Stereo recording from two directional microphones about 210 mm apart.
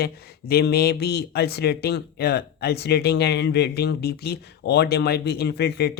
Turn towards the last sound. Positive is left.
turn(degrees=50)  # may be behind; listen again after turning